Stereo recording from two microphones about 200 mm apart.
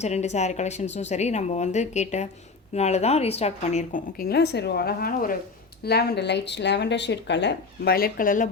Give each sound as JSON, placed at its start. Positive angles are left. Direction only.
{"t": 0.0, "sound": "a woman's voice", "side_deg": 35}